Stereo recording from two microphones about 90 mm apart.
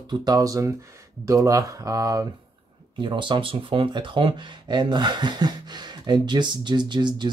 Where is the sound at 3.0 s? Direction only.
60° right (ahead or behind).